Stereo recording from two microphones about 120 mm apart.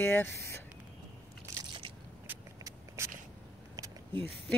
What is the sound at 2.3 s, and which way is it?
Vehicle, 15° right (ahead or behind).